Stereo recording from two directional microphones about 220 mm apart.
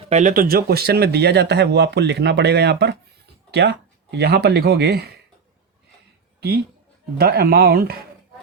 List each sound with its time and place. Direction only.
0.1 s speech: 35° right (ahead or behind)
7.2 s speech: 45° right (ahead or behind)